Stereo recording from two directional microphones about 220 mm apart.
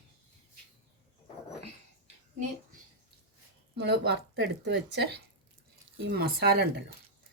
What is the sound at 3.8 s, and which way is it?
Speech, 50° right (ahead or behind).